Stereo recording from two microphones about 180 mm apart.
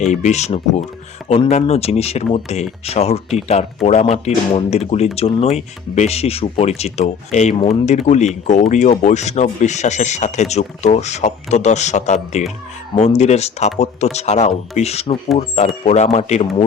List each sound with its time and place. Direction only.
0.0 s speech: 40° left (ahead or behind)